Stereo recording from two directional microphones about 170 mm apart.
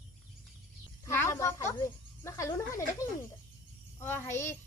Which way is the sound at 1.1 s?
15° left (ahead or behind).